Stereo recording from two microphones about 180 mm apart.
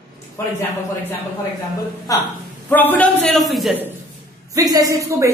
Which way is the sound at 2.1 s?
20° left (ahead or behind).